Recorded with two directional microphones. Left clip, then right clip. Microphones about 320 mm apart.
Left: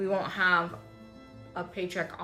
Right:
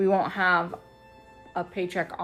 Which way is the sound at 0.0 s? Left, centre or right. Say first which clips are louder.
Right 4 dB; centre.